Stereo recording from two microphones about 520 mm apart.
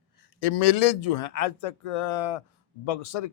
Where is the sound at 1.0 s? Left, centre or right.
Left.